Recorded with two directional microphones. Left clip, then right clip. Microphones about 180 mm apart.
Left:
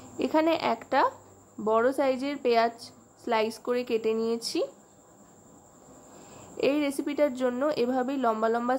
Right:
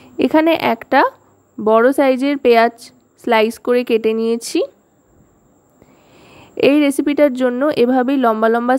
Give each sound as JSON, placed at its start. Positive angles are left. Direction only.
{"t": 0.0, "sound": "a woman's voice", "side_deg": -45}
{"t": 6.1, "sound": "a woman's voice", "side_deg": -45}